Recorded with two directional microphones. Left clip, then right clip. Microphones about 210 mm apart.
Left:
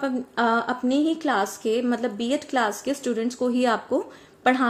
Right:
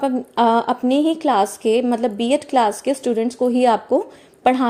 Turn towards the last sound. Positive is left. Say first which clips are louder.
# right 4 dB
turn(degrees=-25)  # may be behind; listen again after turning